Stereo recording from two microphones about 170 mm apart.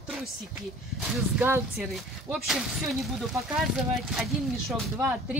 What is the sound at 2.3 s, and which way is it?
Speech, centre (ahead or behind).